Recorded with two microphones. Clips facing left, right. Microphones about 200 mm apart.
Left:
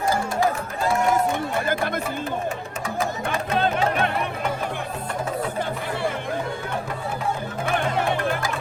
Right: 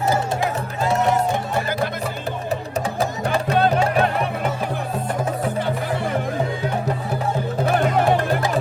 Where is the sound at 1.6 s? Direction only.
50° left (ahead or behind).